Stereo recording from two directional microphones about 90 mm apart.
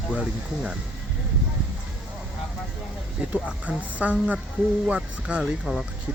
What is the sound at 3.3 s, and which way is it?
Speech, 15° right (ahead or behind).